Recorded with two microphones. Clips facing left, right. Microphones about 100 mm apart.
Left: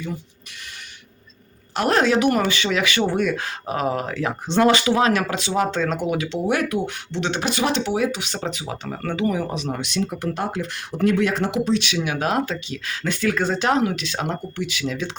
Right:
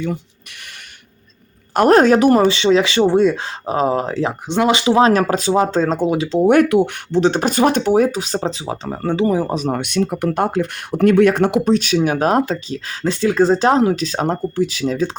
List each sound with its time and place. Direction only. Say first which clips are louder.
1.7 s a woman's voice: right 8 dB; 45° right (ahead or behind)
2.4 s speech: right 8 dB; 25° right (ahead or behind)
4.4 s speech: right 1 dB; 15° right (ahead or behind); by 6.4 s 30° right (ahead or behind)
6.4 s speech: right 12 dB; 50° right (ahead or behind)
7.1 s speech: right 8 dB; 40° right (ahead or behind)
9.7 s speech: right 6 dB; 55° right (ahead or behind); by 15.1 s 35° right (ahead or behind)